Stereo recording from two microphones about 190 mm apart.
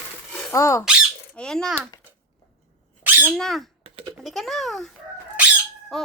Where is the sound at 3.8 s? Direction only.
30° right (ahead or behind).